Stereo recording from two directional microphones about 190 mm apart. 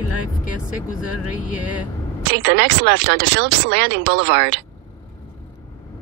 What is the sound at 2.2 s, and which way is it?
Speech, 65° right (ahead or behind).